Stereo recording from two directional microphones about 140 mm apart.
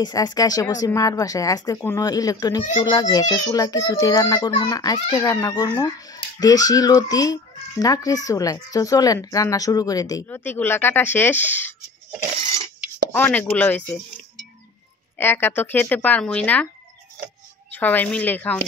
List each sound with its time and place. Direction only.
0.0 s speech: 30° left (ahead or behind); by 11.7 s 15° left (ahead or behind)
13.1 s speech: 15° left (ahead or behind)
15.1 s speech: 15° left (ahead or behind)
17.6 s speech: 10° left (ahead or behind)